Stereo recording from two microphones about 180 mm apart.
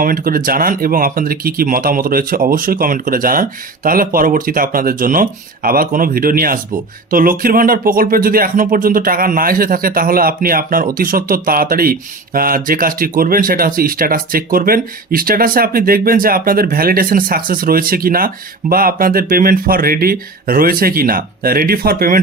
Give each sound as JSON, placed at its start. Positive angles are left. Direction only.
{"t": 0.0, "sound": "speech", "side_deg": -55}